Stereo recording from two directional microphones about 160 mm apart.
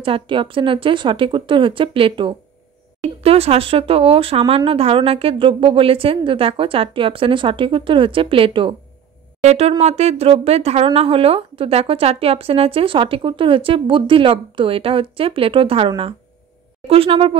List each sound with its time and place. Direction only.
0.0 s speech: 30° right (ahead or behind)